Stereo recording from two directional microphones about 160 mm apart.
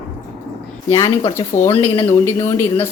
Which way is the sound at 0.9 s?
20° left (ahead or behind).